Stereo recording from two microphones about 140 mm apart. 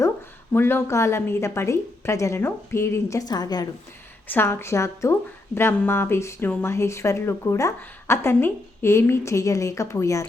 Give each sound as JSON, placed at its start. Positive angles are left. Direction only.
{"t": 0.5, "sound": "speech", "side_deg": 15}
{"t": 4.3, "sound": "speech", "side_deg": 15}